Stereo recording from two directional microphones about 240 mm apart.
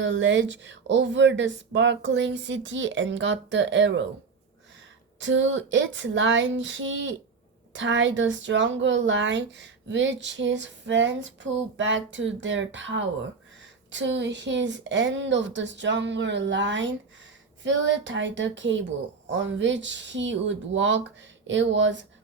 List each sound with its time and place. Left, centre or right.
0.0 s a woman's voice: right
5.2 s a woman's voice: right